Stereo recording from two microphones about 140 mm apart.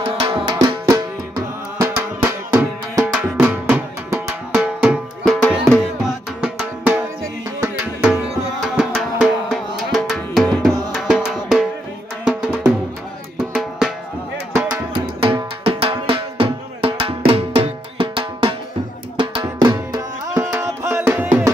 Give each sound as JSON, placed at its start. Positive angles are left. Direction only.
{"t": 0.0, "sound": "music", "side_deg": -35}
{"t": 1.8, "sound": "music", "side_deg": -15}
{"t": 3.1, "sound": "music", "side_deg": -5}
{"t": 5.4, "sound": "music", "side_deg": 10}
{"t": 6.0, "sound": "music", "side_deg": -5}
{"t": 7.6, "sound": "tabla", "side_deg": -10}
{"t": 8.6, "sound": "music", "side_deg": 0}
{"t": 15.6, "sound": "drum", "side_deg": -45}
{"t": 17.3, "sound": "music", "side_deg": -45}
{"t": 19.6, "sound": "music", "side_deg": -25}
{"t": 20.5, "sound": "music", "side_deg": -15}